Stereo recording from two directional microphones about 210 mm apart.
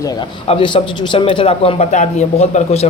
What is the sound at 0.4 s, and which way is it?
A man's voice, 25° left (ahead or behind).